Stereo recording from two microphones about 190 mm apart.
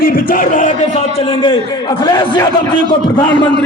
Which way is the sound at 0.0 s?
45° left (ahead or behind).